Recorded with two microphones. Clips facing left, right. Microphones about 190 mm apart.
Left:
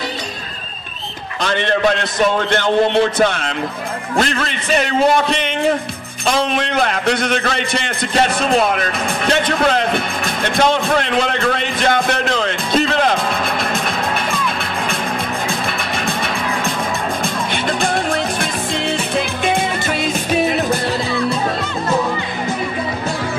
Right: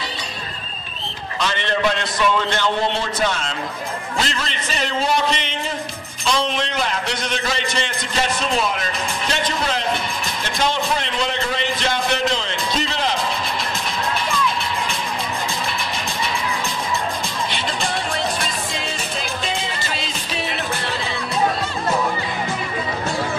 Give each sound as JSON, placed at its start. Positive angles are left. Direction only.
{"t": 1.4, "sound": "a man's voice", "side_deg": 55}
{"t": 15.6, "sound": "music", "side_deg": 60}